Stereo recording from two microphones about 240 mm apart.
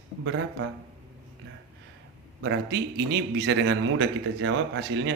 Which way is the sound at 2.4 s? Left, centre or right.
Right.